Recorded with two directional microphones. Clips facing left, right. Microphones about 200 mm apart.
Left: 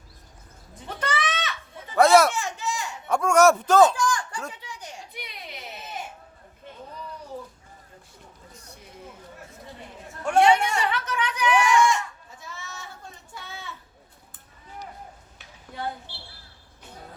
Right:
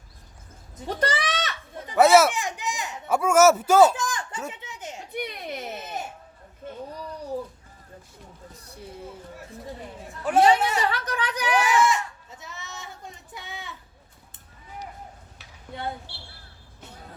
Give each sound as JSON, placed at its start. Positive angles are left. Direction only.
{"t": 0.9, "sound": "goat", "side_deg": -35}
{"t": 1.9, "sound": "speech", "side_deg": -5}
{"t": 2.3, "sound": "a sound", "side_deg": -15}
{"t": 3.1, "sound": "speech", "side_deg": -5}
{"t": 3.9, "sound": "a sound", "side_deg": -20}
{"t": 4.6, "sound": "children playing", "side_deg": -25}
{"t": 5.1, "sound": "baby cry", "side_deg": -50}
{"t": 10.4, "sound": "a sound", "side_deg": -35}
{"t": 11.6, "sound": "goat", "side_deg": -5}
{"t": 12.3, "sound": "sheep", "side_deg": -20}